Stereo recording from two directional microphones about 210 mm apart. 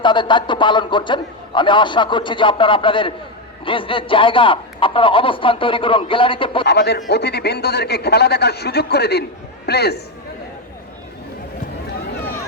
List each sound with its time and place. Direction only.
0.0 s a man's voice: 20° left (ahead or behind)
6.7 s speech: 50° left (ahead or behind)